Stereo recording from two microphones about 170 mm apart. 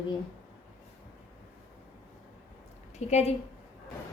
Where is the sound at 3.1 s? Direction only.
40° left (ahead or behind).